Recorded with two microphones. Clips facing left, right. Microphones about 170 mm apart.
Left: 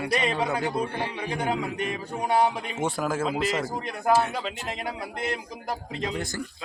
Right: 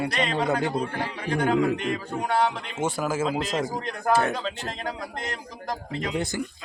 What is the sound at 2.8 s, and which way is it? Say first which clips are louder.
Speech: right 2 dB; centre (ahead or behind).